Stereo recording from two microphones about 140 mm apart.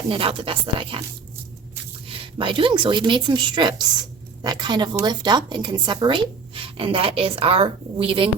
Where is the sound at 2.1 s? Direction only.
40° right (ahead or behind).